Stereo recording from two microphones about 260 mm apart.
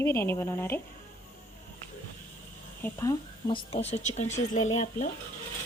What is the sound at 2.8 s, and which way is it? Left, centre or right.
Speech, centre.